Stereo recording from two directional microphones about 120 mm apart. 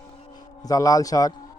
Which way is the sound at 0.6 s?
30° left (ahead or behind).